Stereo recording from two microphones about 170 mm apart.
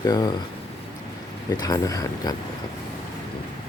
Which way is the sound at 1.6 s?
25° left (ahead or behind).